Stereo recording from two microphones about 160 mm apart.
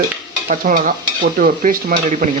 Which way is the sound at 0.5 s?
55° right (ahead or behind).